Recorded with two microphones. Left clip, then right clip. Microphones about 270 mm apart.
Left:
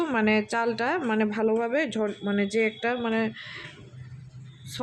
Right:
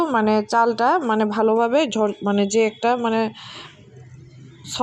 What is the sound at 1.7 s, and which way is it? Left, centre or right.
Speech, centre.